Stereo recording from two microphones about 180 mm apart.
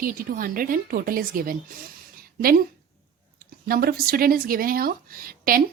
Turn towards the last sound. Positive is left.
turn(degrees=-55)  # may be behind; listen again after turning